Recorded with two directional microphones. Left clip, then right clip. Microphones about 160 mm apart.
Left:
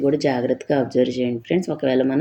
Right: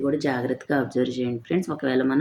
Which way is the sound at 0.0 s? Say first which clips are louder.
Left 5 dB; 15° left (ahead or behind).